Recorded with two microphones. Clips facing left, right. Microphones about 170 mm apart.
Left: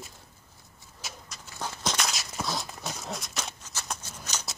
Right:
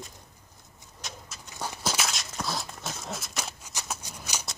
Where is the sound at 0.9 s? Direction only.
Centre (ahead or behind).